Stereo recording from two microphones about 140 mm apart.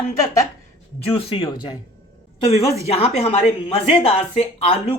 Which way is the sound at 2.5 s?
45° left (ahead or behind).